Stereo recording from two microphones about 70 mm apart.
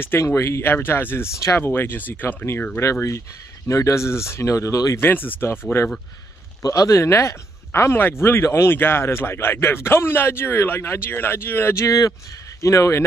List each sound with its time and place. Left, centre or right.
0.0 s speech: left
1.6 s speech: left
2.8 s speech: left
4.9 s speech: left
6.6 s speech: left
12.6 s speech: left